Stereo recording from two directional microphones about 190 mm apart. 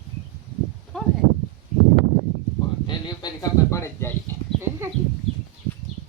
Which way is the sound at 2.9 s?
20° left (ahead or behind).